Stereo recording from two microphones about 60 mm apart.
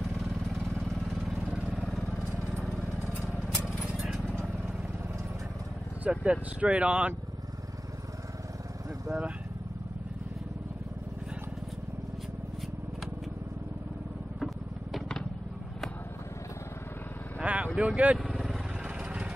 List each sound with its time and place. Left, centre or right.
3.3 s a sound: centre
6.0 s speech: right
14.4 s vehicle: centre
17.4 s vehicle: centre
17.7 s speech: right
18.1 s vehicle: centre